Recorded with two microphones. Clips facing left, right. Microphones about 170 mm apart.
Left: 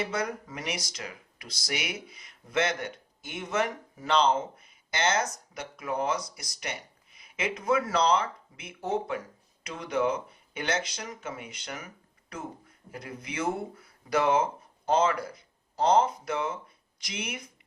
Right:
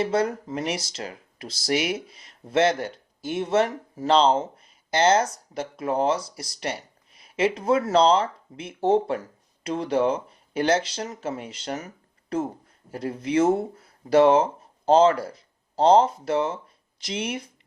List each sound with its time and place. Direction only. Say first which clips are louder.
0.0 s speech: right 8 dB; 30° right (ahead or behind)
12.9 s speech: right 14 dB; 30° right (ahead or behind)